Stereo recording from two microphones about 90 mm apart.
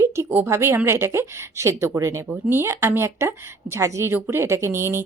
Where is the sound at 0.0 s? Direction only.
30° right (ahead or behind).